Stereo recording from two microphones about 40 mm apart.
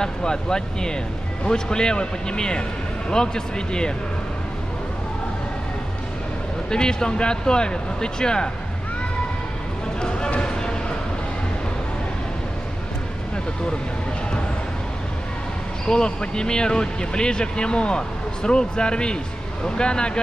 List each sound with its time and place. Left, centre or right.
0.0 s speech: centre
6.7 s speech: centre
10.0 s a sound: left
15.8 s speech: left